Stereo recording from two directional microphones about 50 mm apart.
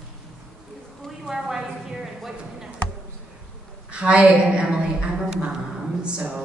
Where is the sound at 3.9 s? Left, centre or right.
Right.